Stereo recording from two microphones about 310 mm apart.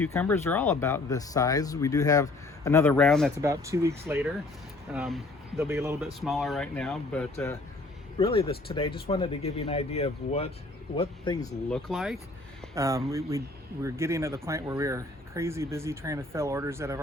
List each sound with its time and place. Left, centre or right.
0.0 s speech: centre
3.4 s speech: centre
11.7 s speech: centre